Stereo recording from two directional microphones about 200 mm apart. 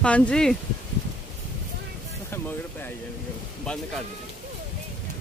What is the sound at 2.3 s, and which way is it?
Music, 10° left (ahead or behind).